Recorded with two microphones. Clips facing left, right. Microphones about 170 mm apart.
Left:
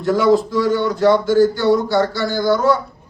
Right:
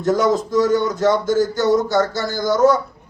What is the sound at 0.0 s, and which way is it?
Speech, 45° right (ahead or behind).